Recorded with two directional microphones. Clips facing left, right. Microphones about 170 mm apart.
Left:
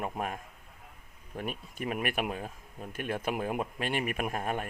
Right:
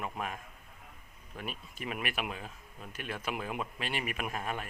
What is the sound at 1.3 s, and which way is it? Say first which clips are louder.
Speech: left 5 dB; 50° left (ahead or behind).